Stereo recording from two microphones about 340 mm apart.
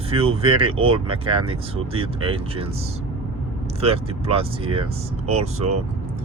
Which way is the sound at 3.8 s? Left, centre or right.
Centre.